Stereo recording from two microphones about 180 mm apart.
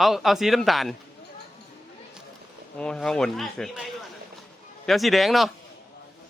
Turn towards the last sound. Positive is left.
turn(degrees=0)  # may be behind; listen again after turning